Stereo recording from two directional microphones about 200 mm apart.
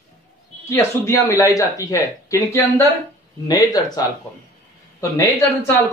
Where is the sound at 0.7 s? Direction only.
15° left (ahead or behind).